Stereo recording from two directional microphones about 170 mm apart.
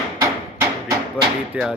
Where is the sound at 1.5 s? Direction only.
5° right (ahead or behind).